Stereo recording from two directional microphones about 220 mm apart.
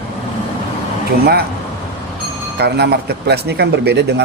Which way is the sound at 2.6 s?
45° right (ahead or behind).